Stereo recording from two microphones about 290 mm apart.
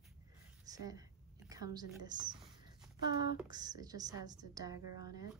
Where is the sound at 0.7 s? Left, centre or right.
Centre.